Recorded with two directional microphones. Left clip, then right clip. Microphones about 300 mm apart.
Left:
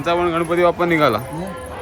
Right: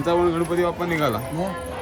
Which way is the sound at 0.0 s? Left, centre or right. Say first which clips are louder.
Left 2 dB; centre.